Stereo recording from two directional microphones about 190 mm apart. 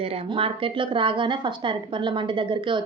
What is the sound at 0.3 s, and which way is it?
A woman's voice, 30° right (ahead or behind).